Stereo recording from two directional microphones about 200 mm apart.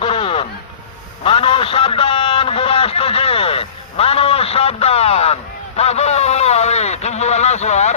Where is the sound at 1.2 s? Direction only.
25° left (ahead or behind).